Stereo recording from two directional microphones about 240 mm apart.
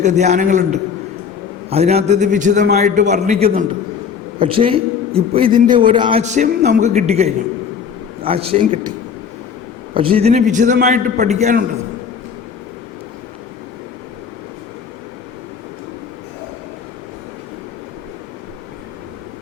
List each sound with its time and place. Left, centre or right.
0.0 s a man's voice: right
9.9 s a man's voice: right